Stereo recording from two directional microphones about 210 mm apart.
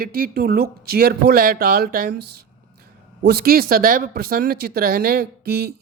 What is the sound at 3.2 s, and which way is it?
Speech, 45° right (ahead or behind).